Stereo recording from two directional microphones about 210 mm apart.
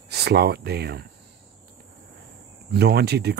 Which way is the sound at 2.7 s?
50° right (ahead or behind).